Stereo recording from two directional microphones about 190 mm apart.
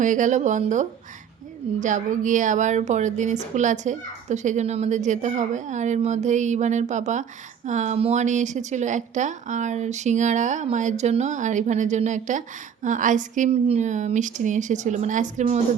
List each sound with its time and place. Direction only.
0.0 s a woman's voice: 40° right (ahead or behind)